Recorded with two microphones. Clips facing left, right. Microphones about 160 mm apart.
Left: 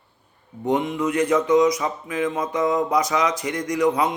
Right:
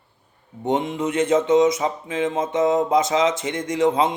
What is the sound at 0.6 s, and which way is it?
Speech, 25° right (ahead or behind).